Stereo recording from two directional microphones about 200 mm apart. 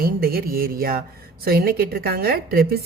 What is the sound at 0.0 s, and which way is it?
Speech, 50° right (ahead or behind).